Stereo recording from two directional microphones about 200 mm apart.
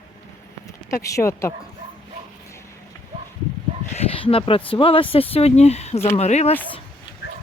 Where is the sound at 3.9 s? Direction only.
25° left (ahead or behind).